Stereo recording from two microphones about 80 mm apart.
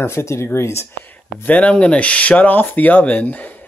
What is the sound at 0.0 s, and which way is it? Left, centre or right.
Speech, left.